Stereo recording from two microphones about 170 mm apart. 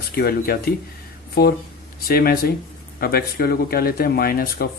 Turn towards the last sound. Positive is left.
turn(degrees=60)  # may be behind; listen again after turning